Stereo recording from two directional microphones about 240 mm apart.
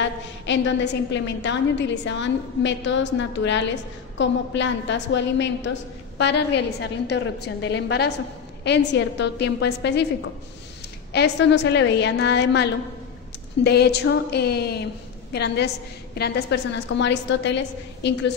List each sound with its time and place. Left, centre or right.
0.0 s a woman's voice: left
11.1 s a woman's voice: left
13.7 s a woman's voice: left